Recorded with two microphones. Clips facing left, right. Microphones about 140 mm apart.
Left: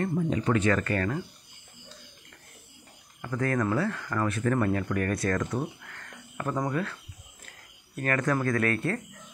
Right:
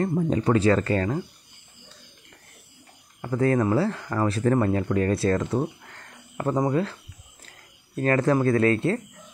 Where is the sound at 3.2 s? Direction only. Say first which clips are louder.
Right 6 dB; 30° right (ahead or behind).